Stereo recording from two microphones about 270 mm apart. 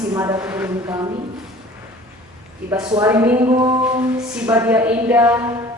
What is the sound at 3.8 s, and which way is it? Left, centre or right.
Speech, centre.